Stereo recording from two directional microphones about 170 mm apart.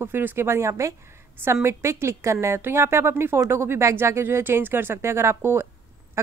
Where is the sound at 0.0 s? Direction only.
10° right (ahead or behind).